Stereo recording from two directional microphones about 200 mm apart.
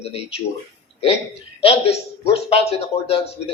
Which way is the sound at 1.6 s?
30° left (ahead or behind).